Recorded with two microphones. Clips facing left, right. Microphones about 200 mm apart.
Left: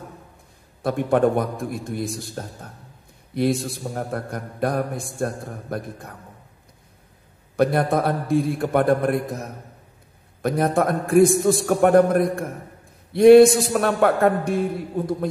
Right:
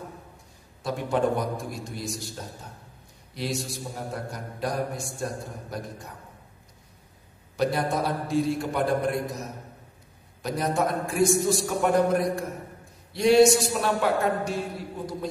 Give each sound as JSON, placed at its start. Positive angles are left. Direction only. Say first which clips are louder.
{"t": 0.8, "sound": "a man's voice", "louder": "left 6 dB", "side_deg": 55}
{"t": 7.5, "sound": "a man's voice", "louder": "left 6 dB", "side_deg": 55}